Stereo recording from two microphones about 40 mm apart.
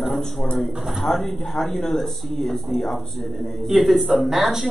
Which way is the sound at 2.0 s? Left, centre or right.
Centre.